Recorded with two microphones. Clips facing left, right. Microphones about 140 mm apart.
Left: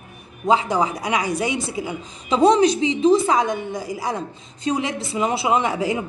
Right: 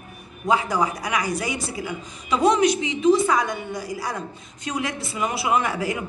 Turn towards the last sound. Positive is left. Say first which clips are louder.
# left 3 dB
turn(degrees=20)  # may be behind; listen again after turning